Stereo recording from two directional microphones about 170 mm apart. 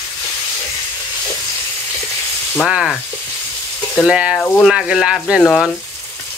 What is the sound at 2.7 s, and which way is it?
Speech, 5° right (ahead or behind).